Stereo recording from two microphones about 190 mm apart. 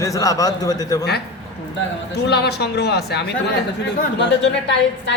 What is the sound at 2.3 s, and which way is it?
A woman's voice, 60° left (ahead or behind).